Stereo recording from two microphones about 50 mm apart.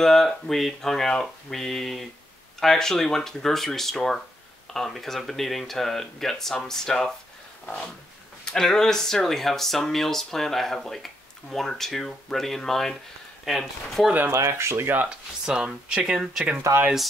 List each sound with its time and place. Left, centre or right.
0.0 s speech: centre
8.5 s speech: centre
14.3 s speech: right
15.0 s speech: centre
16.7 s speech: right